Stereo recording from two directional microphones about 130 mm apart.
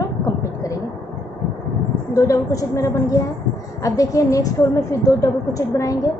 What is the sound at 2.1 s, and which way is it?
A woman's voice, 25° left (ahead or behind).